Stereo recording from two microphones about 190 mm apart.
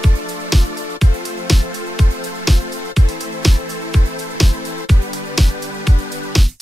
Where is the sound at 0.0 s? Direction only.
Centre (ahead or behind).